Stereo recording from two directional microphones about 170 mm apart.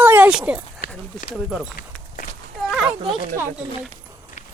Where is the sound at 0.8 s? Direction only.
60° left (ahead or behind).